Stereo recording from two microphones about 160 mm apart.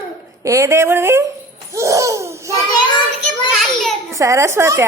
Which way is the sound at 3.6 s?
Centre (ahead or behind).